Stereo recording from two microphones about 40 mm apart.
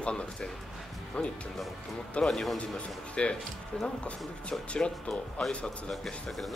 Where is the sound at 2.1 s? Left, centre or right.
Left.